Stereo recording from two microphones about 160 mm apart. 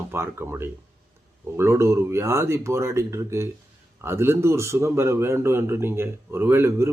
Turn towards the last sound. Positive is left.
turn(degrees=-15)  # may be behind; listen again after turning